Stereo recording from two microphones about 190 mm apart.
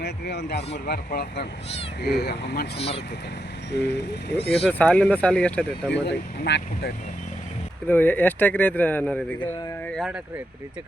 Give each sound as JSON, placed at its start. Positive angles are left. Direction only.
{"t": 0.0, "sound": "speech", "side_deg": 60}
{"t": 2.7, "sound": "speech", "side_deg": 30}
{"t": 4.3, "sound": "speech", "side_deg": 60}
{"t": 4.6, "sound": "speech", "side_deg": 5}
{"t": 5.9, "sound": "speech", "side_deg": 65}
{"t": 7.9, "sound": "speech", "side_deg": 10}